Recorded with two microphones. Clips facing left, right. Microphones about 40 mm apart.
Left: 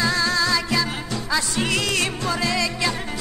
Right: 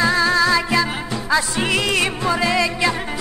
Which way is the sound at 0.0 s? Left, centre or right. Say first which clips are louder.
Right 5 dB; centre.